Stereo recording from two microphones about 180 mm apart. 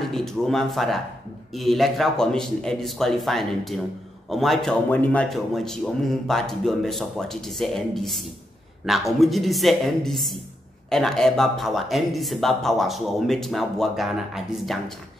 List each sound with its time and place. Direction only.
0.1 s speech: centre (ahead or behind)